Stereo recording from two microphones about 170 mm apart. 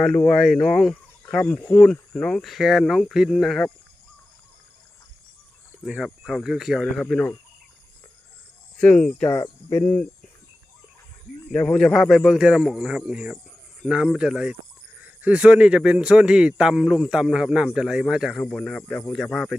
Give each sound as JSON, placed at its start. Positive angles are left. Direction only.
{"t": 0.0, "sound": "speech", "side_deg": 5}
{"t": 5.8, "sound": "speech", "side_deg": 0}
{"t": 8.8, "sound": "speech", "side_deg": 5}
{"t": 9.3, "sound": "speech", "side_deg": 20}
{"t": 9.8, "sound": "speech", "side_deg": 5}
{"t": 11.5, "sound": "speech", "side_deg": 5}